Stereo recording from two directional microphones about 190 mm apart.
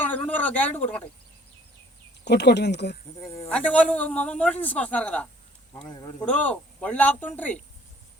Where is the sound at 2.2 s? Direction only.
60° left (ahead or behind).